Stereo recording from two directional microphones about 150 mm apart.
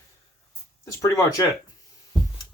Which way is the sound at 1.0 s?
20° left (ahead or behind).